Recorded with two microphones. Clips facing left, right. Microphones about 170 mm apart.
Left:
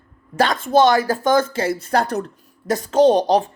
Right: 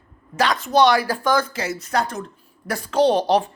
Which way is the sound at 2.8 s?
45° left (ahead or behind).